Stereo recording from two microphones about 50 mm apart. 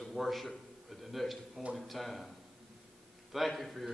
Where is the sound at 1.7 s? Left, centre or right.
Centre.